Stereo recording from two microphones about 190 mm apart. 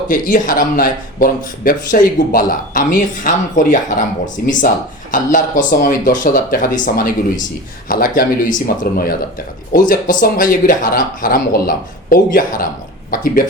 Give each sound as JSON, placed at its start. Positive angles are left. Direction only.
{"t": 0.1, "sound": "speech", "side_deg": 45}